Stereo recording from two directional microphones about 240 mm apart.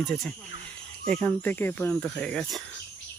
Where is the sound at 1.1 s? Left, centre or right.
Centre.